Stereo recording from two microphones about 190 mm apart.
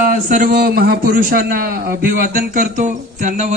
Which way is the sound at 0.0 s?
45° right (ahead or behind).